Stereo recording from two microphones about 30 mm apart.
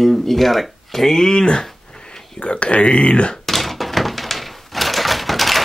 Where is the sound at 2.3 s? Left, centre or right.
Left.